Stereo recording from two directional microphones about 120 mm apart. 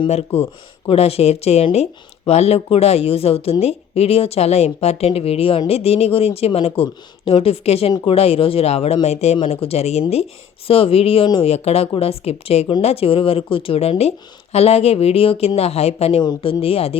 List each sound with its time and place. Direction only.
0.9 s speech: 55° left (ahead or behind)
16.2 s speech: 40° left (ahead or behind)